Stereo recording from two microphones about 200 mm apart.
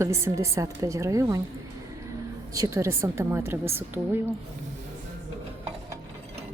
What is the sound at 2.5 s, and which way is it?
A woman's voice, 15° right (ahead or behind).